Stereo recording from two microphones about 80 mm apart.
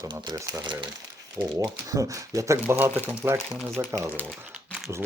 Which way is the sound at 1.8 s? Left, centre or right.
Right.